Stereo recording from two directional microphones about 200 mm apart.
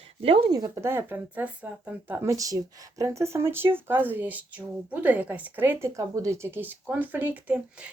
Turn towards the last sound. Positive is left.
turn(degrees=-5)  # may be behind; listen again after turning